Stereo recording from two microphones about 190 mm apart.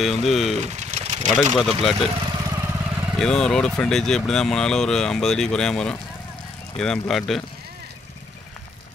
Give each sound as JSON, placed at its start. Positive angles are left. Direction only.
{"t": 0.0, "sound": "speech", "side_deg": 0}
{"t": 0.6, "sound": "vehicle", "side_deg": -35}
{"t": 1.3, "sound": "speech", "side_deg": 0}
{"t": 2.5, "sound": "vehicle", "side_deg": -15}
{"t": 3.2, "sound": "speech", "side_deg": 5}